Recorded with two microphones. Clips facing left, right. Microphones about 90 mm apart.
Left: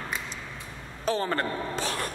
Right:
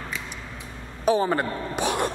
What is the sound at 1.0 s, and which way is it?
A woman's voice, 10° right (ahead or behind).